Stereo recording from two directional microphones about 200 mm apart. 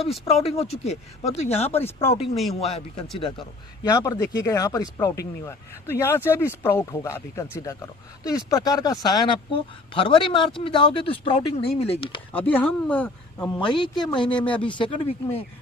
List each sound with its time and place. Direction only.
0.0 s speech: centre (ahead or behind)
0.4 s speech: 30° left (ahead or behind)
2.3 s speech: centre (ahead or behind)
2.6 s speech: 30° left (ahead or behind)
12.3 s speech: 10° left (ahead or behind)
13.6 s speech: 25° left (ahead or behind)
14.3 s speech: 5° left (ahead or behind)
14.6 s speech: 25° left (ahead or behind)